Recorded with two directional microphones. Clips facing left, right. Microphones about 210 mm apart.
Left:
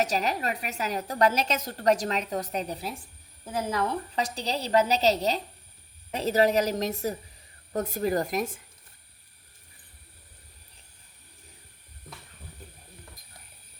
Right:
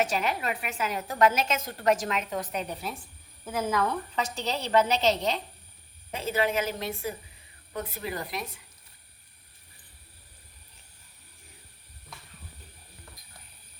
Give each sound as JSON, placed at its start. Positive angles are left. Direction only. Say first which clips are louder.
{"t": 0.0, "sound": "a woman's voice", "louder": "left 1 dB", "side_deg": 40}